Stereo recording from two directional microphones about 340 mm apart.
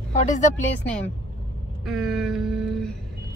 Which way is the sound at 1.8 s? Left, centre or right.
Centre.